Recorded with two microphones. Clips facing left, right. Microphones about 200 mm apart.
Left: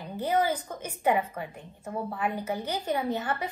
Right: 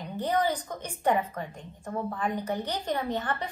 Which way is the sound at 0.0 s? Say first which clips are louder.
Left 1 dB; 5° left (ahead or behind).